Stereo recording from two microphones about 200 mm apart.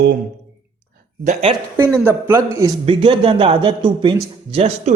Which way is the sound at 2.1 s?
10° right (ahead or behind).